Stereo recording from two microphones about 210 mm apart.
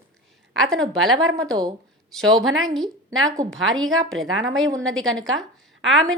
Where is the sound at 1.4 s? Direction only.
20° right (ahead or behind).